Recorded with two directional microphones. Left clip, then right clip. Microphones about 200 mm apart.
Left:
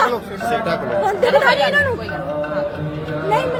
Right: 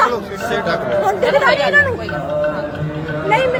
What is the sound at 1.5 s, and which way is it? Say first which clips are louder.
Speech: right 1 dB; 30° left (ahead or behind).